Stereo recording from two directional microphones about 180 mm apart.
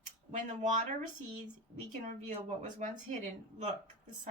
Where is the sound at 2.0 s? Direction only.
40° right (ahead or behind).